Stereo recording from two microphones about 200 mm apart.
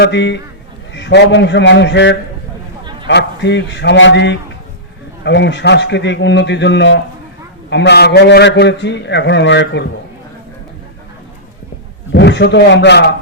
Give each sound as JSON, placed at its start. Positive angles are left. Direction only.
{"t": 0.0, "sound": "a man's voice", "side_deg": 60}
{"t": 12.1, "sound": "a man's voice", "side_deg": 55}